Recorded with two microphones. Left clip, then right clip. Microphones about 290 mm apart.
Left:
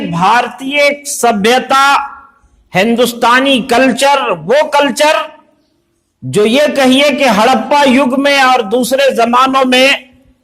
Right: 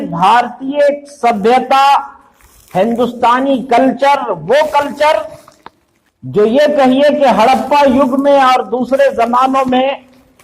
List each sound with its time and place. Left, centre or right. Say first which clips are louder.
0.1 s a man's voice: even; left
2.7 s a man's voice: left 2 dB; left
6.3 s a man's voice: even; left